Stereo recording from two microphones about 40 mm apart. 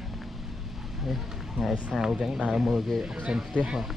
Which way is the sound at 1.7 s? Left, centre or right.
Centre.